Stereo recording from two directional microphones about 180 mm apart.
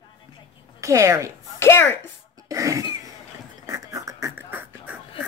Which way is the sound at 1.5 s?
15° left (ahead or behind).